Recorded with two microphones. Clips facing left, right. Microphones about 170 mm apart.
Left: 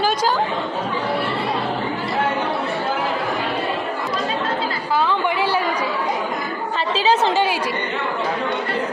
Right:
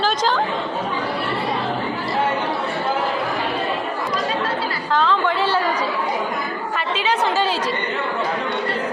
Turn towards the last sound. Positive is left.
turn(degrees=15)  # may be behind; listen again after turning